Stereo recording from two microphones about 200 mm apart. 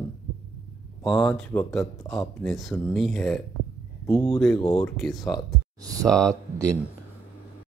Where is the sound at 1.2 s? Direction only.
5° left (ahead or behind).